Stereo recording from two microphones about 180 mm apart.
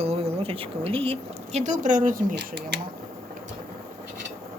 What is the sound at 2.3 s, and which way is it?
Speech, 65° right (ahead or behind).